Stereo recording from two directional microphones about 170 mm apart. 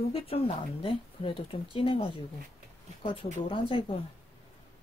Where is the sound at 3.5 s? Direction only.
30° left (ahead or behind).